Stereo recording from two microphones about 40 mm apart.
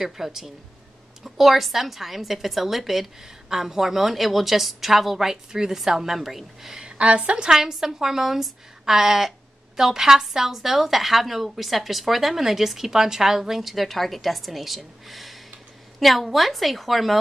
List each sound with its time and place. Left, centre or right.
0.0 s a woman's voice: centre
6.8 s a woman's voice: right
7.4 s a woman's voice: centre